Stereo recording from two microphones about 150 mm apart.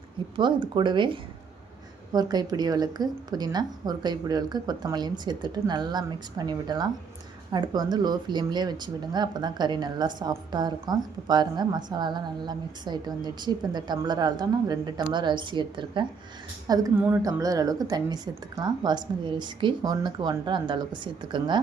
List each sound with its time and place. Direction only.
0.3 s a woman's voice: 30° right (ahead or behind)